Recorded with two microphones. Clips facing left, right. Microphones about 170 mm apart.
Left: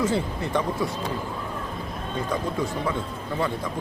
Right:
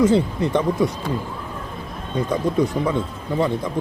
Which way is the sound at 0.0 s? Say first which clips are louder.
Right 8 dB; 20° right (ahead or behind).